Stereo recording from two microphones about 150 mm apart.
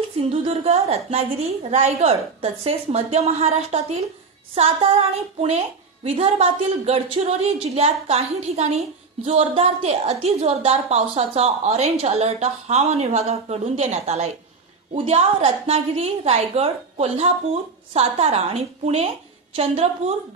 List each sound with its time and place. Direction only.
0.3 s a woman's voice: 40° right (ahead or behind)